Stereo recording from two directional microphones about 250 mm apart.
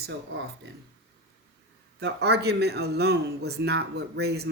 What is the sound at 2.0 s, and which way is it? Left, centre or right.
Speech, right.